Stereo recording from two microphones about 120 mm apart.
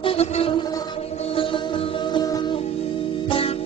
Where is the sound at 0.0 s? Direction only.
55° left (ahead or behind).